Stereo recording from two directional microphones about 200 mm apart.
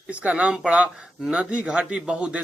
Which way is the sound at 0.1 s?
5° right (ahead or behind).